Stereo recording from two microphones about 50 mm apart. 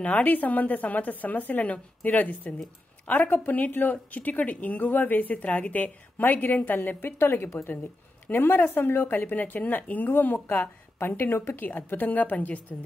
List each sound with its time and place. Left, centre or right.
0.0 s speech: left